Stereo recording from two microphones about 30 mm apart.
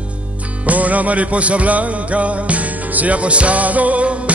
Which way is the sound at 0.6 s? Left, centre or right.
Right.